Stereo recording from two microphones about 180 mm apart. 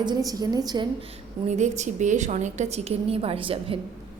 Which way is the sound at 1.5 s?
40° right (ahead or behind).